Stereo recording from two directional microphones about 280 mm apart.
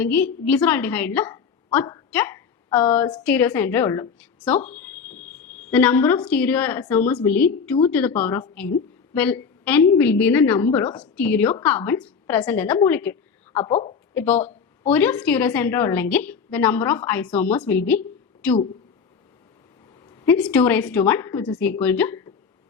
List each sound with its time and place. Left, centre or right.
0.0 s a woman's voice: centre
13.6 s a woman's voice: centre
14.1 s a woman's voice: centre
20.1 s a woman's voice: centre